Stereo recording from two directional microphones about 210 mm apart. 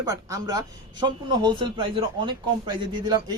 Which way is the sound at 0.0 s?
15° right (ahead or behind).